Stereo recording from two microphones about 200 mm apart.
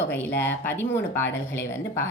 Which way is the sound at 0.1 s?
10° left (ahead or behind).